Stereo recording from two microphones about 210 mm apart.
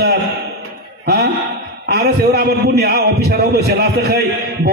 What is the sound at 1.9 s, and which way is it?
A man's voice, 50° right (ahead or behind).